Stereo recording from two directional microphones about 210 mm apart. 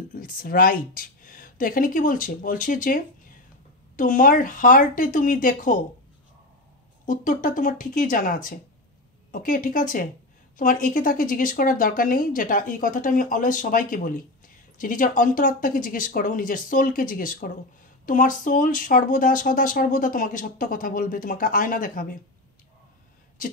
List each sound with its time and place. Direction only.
0.1 s speech: 40° left (ahead or behind)
7.1 s speech: 40° left (ahead or behind)